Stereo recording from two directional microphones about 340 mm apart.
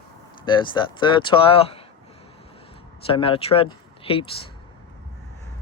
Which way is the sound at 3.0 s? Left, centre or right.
Centre.